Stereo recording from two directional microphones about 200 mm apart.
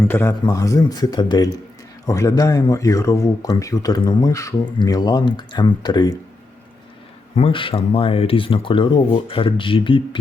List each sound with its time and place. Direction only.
0.1 s a man's voice: 10° left (ahead or behind)
7.3 s speech: 25° left (ahead or behind)